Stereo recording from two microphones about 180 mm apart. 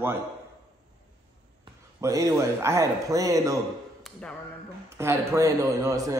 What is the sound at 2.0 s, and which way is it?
Speech, 15° right (ahead or behind).